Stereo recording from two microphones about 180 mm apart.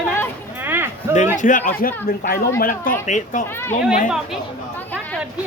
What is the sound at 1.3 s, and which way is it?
Speech, 45° left (ahead or behind).